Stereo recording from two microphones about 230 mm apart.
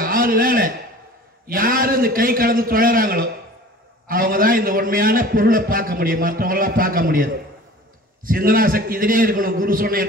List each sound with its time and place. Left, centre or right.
0.0 s a sound: right
1.5 s a man's voice: right
8.3 s a man's voice: right